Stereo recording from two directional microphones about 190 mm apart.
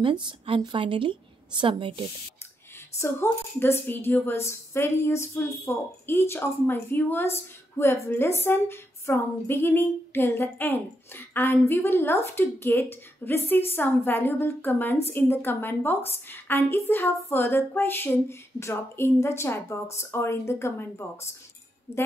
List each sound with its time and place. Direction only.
0.0 s a woman's voice: 25° right (ahead or behind)
3.0 s speech: 10° left (ahead or behind)